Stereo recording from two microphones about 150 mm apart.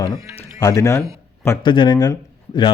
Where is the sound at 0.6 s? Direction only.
20° left (ahead or behind).